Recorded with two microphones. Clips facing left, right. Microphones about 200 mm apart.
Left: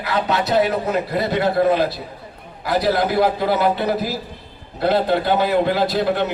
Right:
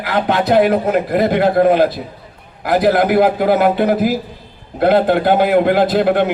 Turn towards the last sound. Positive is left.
turn(degrees=-50)  # may be behind; listen again after turning